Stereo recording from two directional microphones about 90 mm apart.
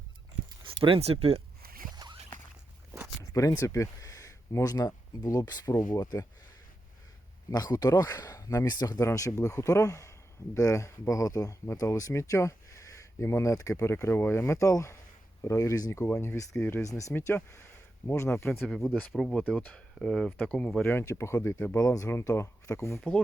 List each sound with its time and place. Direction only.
0.6 s speech: 75° right (ahead or behind)
3.3 s speech: 35° left (ahead or behind)
7.5 s speech: 45° left (ahead or behind)
8.7 s speech: 50° left (ahead or behind)
9.0 s speech: 35° left (ahead or behind)
16.8 s speech: 35° left (ahead or behind)
17.2 s speech: 25° left (ahead or behind)
18.6 s speech: 5° left (ahead or behind)
19.4 s speech: 15° left (ahead or behind)
20.0 s speech: 5° left (ahead or behind)
20.8 s speech: 30° left (ahead or behind)
21.8 s speech: 40° left (ahead or behind)